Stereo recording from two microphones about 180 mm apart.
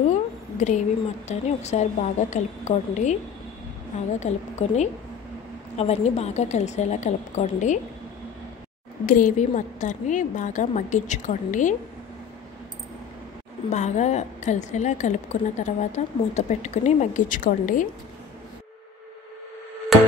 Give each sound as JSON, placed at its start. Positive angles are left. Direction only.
{"t": 0.1, "sound": "a woman's voice", "side_deg": 40}
{"t": 4.2, "sound": "a woman's voice", "side_deg": 40}
{"t": 9.0, "sound": "a woman's voice", "side_deg": 45}
{"t": 13.7, "sound": "a woman's voice", "side_deg": 40}